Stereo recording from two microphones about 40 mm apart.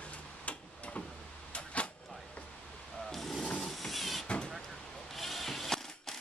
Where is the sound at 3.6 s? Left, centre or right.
Centre.